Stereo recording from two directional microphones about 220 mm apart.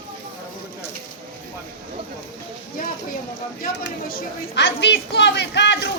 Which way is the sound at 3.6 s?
45° left (ahead or behind).